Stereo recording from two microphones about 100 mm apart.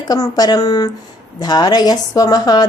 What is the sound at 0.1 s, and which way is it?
Speech, 40° left (ahead or behind).